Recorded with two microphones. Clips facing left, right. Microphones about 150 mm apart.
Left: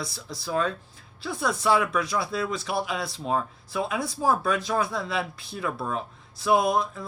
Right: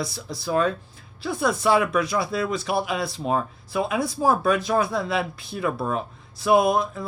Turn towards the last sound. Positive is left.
turn(degrees=-60)  # may be behind; listen again after turning